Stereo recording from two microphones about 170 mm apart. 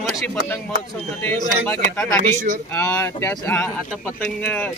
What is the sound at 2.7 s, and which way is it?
Speech, 10° left (ahead or behind).